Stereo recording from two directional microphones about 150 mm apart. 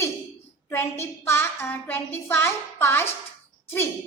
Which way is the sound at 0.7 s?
15° left (ahead or behind).